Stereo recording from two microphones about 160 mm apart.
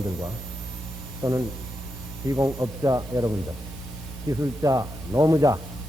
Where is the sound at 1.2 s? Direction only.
15° right (ahead or behind).